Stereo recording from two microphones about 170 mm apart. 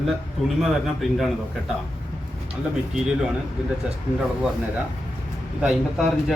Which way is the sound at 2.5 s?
5° right (ahead or behind).